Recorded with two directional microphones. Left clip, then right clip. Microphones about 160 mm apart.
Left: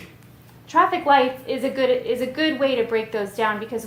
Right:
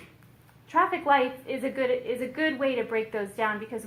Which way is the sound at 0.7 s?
15° right (ahead or behind).